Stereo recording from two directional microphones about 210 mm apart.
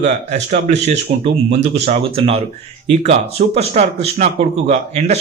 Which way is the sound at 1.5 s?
30° right (ahead or behind).